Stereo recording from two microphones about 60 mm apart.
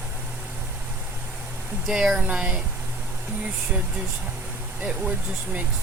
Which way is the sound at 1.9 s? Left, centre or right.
Centre.